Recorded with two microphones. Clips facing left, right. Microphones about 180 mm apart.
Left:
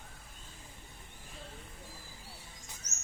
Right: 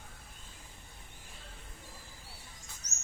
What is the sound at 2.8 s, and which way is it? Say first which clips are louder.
Bird: left 1 dB; 25° left (ahead or behind).